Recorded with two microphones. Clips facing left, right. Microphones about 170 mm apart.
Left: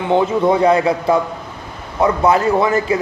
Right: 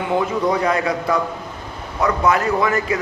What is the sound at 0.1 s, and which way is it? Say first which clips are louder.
A man's voice: left 5 dB; 25° left (ahead or behind).